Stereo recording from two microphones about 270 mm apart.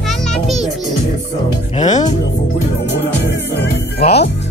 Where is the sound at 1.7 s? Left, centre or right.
Left.